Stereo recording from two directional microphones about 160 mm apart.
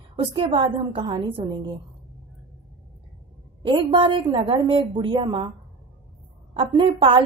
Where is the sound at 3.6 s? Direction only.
30° right (ahead or behind).